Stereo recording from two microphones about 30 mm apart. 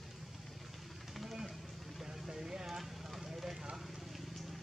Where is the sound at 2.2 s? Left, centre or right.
Centre.